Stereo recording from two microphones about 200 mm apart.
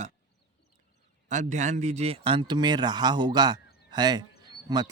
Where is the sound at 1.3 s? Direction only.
35° right (ahead or behind).